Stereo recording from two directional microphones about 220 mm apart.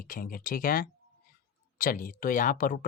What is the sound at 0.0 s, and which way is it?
Speech, 40° left (ahead or behind).